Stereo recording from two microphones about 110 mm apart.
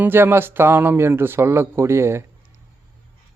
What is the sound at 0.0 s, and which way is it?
Speech, 20° right (ahead or behind).